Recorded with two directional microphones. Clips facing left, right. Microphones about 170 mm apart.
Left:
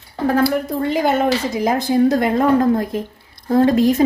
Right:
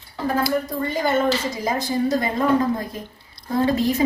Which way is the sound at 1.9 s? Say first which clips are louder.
Left 7 dB; 60° left (ahead or behind).